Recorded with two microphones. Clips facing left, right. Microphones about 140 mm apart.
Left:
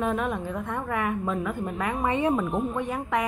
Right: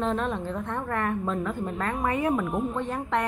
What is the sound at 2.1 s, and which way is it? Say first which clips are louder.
Speech: left 2 dB; 20° left (ahead or behind).